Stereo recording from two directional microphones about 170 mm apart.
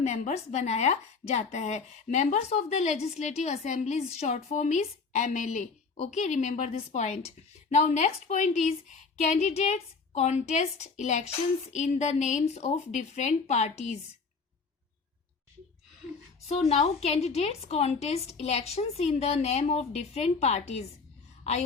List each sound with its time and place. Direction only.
0.0 s speech: 45° left (ahead or behind)
16.5 s a woman's voice: 40° left (ahead or behind)